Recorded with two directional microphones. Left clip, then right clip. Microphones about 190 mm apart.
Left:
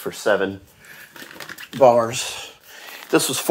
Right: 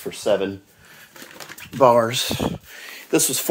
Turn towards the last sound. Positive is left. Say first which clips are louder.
# left 2 dB
turn(degrees=-10)  # may be behind; listen again after turning